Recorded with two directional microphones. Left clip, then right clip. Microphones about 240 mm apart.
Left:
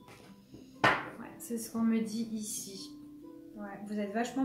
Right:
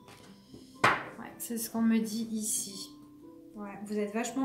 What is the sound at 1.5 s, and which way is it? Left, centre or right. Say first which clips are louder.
Speech: right 2 dB; right.